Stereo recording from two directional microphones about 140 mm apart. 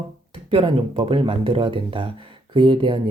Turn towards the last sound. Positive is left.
turn(degrees=-35)  # may be behind; listen again after turning